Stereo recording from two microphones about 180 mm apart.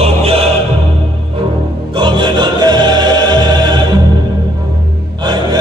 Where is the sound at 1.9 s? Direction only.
25° right (ahead or behind).